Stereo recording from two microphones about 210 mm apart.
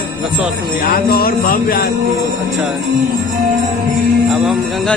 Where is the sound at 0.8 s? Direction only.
45° left (ahead or behind).